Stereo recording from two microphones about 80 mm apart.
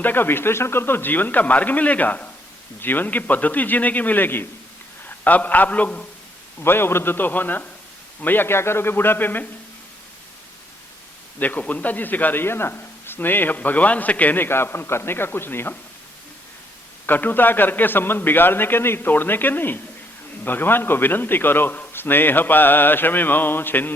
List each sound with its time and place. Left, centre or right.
0.0 s a man's voice: left
6.6 s a man's voice: left
11.3 s a man's voice: left
17.1 s a man's voice: left